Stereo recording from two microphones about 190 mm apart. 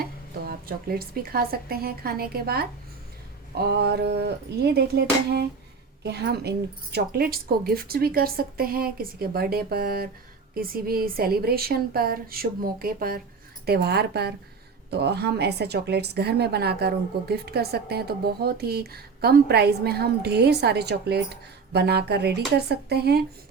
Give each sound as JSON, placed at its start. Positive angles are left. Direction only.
{"t": 0.0, "sound": "a woman's voice", "side_deg": -50}